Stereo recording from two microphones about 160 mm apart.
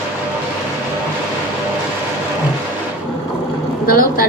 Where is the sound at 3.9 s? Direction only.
65° left (ahead or behind).